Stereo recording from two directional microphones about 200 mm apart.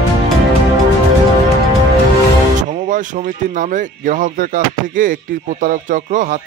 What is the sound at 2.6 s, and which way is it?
Speech, 40° right (ahead or behind).